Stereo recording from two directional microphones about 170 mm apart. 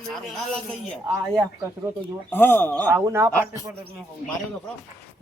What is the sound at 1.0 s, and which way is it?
Speech, 15° right (ahead or behind).